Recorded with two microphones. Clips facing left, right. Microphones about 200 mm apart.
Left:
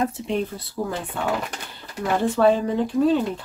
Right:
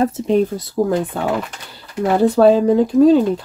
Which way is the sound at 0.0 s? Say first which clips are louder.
Right 8 dB; 40° right (ahead or behind).